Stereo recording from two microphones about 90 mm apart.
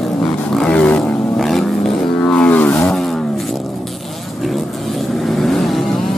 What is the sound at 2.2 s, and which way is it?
Music, 15° left (ahead or behind).